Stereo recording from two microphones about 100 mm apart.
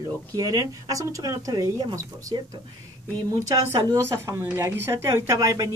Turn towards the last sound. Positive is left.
turn(degrees=-35)  # may be behind; listen again after turning